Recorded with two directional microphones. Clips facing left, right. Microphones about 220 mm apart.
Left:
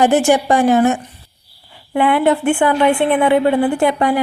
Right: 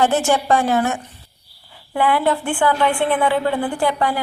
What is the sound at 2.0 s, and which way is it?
A woman's voice, 20° left (ahead or behind).